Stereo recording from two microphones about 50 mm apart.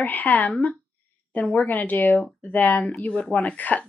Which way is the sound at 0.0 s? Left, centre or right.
Left.